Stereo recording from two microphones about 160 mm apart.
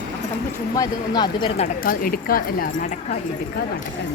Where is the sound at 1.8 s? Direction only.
65° left (ahead or behind).